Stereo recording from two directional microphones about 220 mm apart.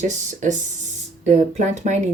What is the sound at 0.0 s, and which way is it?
Speech, 35° right (ahead or behind).